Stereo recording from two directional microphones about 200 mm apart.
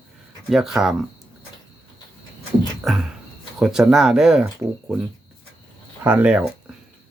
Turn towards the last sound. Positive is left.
turn(degrees=-5)  # may be behind; listen again after turning